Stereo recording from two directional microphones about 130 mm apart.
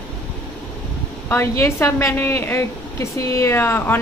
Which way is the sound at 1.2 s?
20° left (ahead or behind).